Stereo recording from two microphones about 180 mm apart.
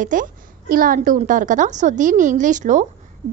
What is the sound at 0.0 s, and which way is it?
A woman's voice, 45° right (ahead or behind).